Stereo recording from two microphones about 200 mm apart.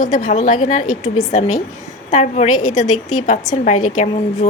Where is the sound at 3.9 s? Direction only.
40° left (ahead or behind).